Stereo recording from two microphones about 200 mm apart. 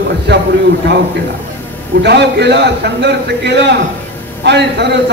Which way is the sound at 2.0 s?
55° right (ahead or behind).